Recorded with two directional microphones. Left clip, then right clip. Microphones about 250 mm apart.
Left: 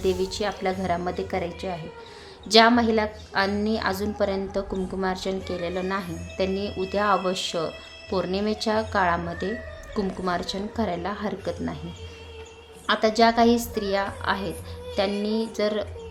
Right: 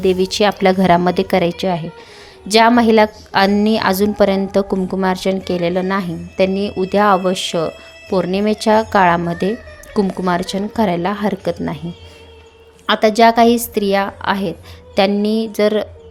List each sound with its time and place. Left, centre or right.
0.0 s a woman's voice: right
12.8 s a woman's voice: right